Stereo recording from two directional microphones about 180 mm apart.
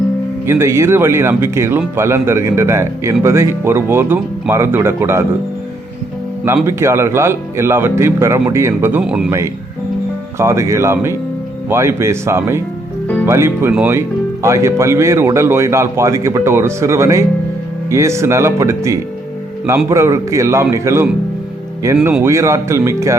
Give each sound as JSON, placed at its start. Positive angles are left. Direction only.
{"t": 0.4, "sound": "speech", "side_deg": -15}
{"t": 6.7, "sound": "speech", "side_deg": -15}
{"t": 10.3, "sound": "speech", "side_deg": -15}